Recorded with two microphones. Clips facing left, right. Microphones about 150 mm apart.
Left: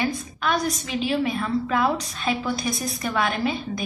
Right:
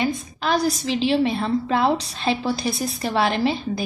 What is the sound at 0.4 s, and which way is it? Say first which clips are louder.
A woman's voice: right 3 dB; 35° right (ahead or behind).